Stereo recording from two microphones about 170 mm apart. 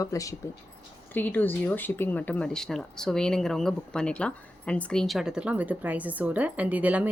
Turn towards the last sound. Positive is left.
turn(degrees=-10)  # may be behind; listen again after turning